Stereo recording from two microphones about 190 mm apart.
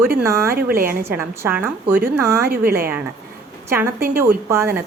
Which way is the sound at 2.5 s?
50° right (ahead or behind).